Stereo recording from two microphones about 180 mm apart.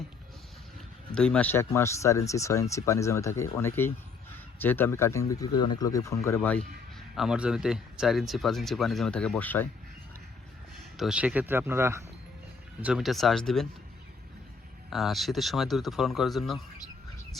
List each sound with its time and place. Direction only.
1.1 s speech: 5° left (ahead or behind)
7.2 s speech: 5° right (ahead or behind)
10.9 s speech: 5° right (ahead or behind)
12.8 s speech: 5° right (ahead or behind)
14.8 s speech: centre (ahead or behind)